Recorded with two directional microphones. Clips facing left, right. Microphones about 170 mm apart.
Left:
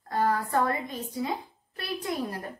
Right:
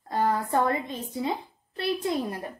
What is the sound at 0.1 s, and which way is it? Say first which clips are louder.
A woman's voice: right 1 dB; 20° right (ahead or behind).